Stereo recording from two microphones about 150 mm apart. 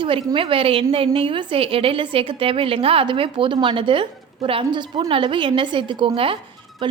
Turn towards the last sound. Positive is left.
turn(degrees=-35)  # may be behind; listen again after turning